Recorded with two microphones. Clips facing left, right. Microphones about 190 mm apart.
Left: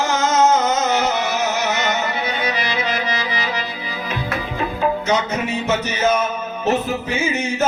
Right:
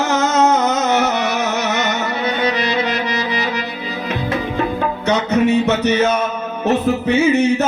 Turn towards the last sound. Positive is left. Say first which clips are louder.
# right 8 dB
turn(degrees=-65)  # may be behind; listen again after turning